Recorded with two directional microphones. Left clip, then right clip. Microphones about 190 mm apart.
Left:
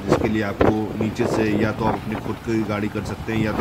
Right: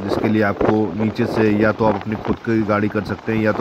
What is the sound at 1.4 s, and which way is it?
Speech, 20° right (ahead or behind).